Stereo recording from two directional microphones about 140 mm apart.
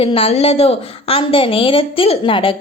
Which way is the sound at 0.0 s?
45° left (ahead or behind).